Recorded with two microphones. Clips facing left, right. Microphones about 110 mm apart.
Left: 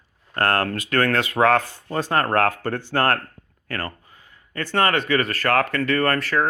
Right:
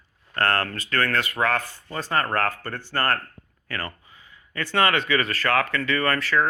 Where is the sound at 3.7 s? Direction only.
50° left (ahead or behind).